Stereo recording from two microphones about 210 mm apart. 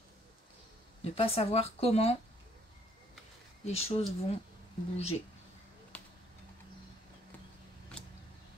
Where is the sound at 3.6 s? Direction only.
30° left (ahead or behind).